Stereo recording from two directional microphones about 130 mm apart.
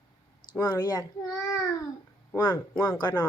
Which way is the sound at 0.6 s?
30° left (ahead or behind).